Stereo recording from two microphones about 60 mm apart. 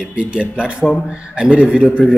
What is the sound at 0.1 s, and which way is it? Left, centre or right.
A man's voice, centre.